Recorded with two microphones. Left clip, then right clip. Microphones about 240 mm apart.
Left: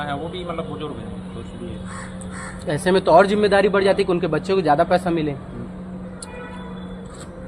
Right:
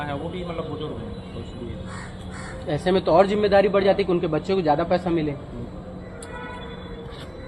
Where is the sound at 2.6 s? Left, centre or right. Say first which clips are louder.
Left 4 dB; left.